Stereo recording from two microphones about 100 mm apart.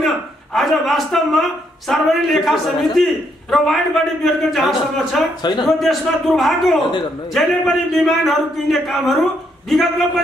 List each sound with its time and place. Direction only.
0.6 s a man's voice: centre (ahead or behind)
5.4 s speech: 45° left (ahead or behind)
5.7 s a man's voice: centre (ahead or behind)